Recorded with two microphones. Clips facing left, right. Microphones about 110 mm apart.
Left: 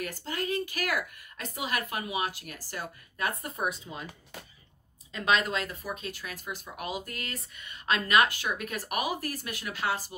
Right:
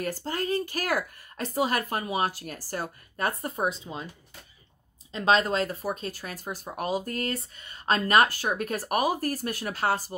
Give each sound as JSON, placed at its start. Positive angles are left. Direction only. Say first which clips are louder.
{"t": 0.0, "sound": "speech", "louder": "right 4 dB", "side_deg": -40}
{"t": 5.1, "sound": "speech", "louder": "right 4 dB", "side_deg": -30}